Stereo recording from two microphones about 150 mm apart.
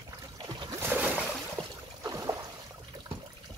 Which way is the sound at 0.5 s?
30° right (ahead or behind).